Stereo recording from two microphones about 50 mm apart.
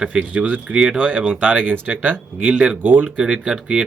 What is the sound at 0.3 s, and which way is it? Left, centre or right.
Speech, right.